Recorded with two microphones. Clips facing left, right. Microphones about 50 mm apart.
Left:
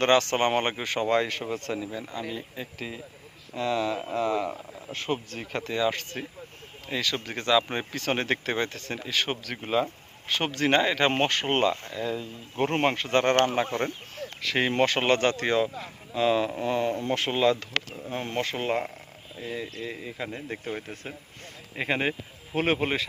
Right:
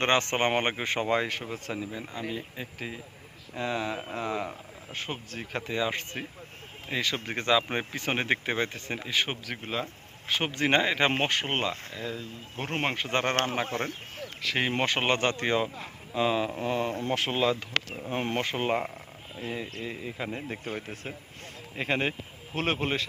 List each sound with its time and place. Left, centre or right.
0.0 s speech: right
4.9 s speech: centre
5.6 s speech: centre
9.6 s speech: centre
10.2 s speech: centre
12.1 s speech: centre
12.8 s speech: centre
13.1 s speech: centre
14.4 s speech: centre
18.1 s speech: right
18.4 s speech: centre
19.9 s speech: centre